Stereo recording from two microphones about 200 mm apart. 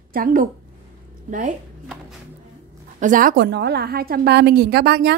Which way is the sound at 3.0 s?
40° right (ahead or behind).